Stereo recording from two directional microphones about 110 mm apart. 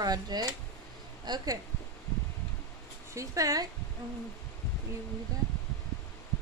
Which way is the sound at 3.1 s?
30° right (ahead or behind).